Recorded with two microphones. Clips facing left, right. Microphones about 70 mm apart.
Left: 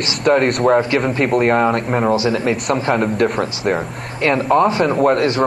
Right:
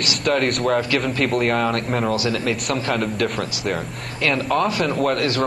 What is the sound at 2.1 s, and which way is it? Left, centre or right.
A man's voice, left.